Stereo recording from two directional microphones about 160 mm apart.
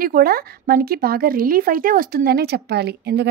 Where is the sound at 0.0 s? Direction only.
65° right (ahead or behind).